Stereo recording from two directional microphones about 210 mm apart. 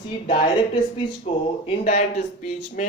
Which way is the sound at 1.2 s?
30° left (ahead or behind).